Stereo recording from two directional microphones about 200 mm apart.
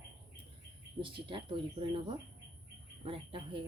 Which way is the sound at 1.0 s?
25° right (ahead or behind).